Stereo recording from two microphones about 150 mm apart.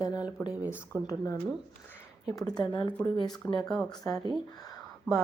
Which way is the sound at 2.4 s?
25° left (ahead or behind).